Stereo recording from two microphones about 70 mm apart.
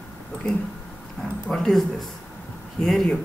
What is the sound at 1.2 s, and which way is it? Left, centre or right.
Speech, left.